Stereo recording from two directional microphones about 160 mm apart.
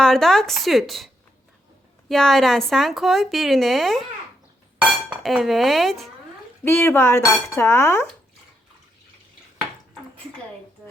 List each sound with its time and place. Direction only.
0.0 s speech: centre (ahead or behind)
6.7 s speech: 15° left (ahead or behind)